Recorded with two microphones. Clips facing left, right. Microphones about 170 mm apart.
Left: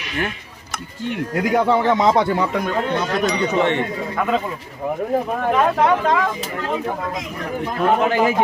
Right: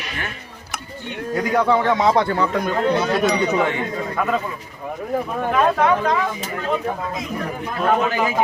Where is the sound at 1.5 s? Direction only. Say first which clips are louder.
Left 1 dB; 25° left (ahead or behind).